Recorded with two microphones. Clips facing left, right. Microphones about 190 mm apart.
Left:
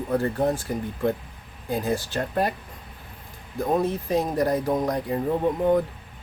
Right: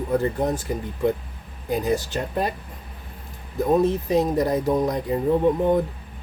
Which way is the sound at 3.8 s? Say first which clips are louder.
Right 4 dB; 20° right (ahead or behind).